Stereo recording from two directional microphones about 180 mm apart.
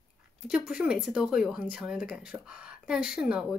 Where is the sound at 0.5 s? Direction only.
5° right (ahead or behind).